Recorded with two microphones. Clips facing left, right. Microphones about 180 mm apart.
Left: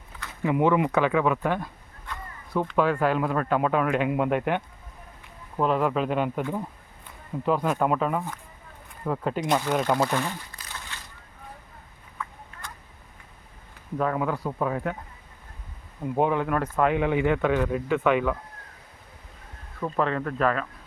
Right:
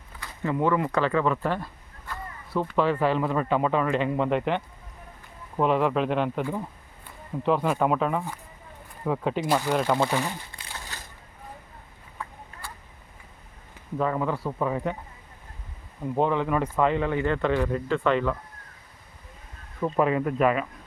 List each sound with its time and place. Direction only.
0.4 s speech: 15° left (ahead or behind)
1.5 s a sound: 5° right (ahead or behind)
2.9 s speech: 5° left (ahead or behind)
10.5 s a sound: 35° right (ahead or behind)
12.2 s a sound: 35° right (ahead or behind)
12.6 s duck: 10° right (ahead or behind)
14.0 s speech: 5° left (ahead or behind)
16.1 s speech: 10° left (ahead or behind)
16.8 s speech: 10° left (ahead or behind)
19.8 s speech: 10° right (ahead or behind)